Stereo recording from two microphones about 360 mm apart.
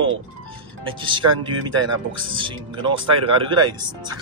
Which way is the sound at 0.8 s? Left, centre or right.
Centre.